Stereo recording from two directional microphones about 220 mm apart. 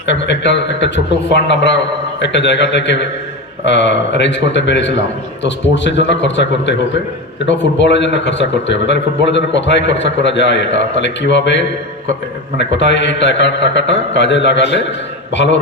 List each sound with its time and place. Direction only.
0.0 s a man's voice: 55° left (ahead or behind)